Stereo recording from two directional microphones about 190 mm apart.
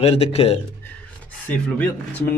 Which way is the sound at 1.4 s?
10° left (ahead or behind).